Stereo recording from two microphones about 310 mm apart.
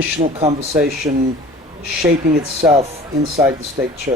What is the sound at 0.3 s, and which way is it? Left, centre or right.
Speech, centre.